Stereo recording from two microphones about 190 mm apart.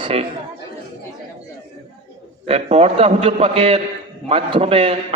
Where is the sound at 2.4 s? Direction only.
35° right (ahead or behind).